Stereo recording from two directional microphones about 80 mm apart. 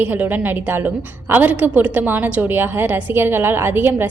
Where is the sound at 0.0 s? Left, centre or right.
Right.